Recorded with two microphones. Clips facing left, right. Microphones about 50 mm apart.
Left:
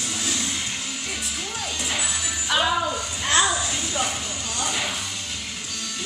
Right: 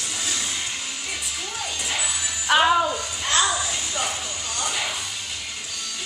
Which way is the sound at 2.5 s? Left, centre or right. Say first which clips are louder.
Right 5 dB; right.